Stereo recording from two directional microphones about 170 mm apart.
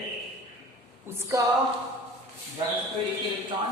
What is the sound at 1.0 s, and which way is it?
Speech, 15° right (ahead or behind).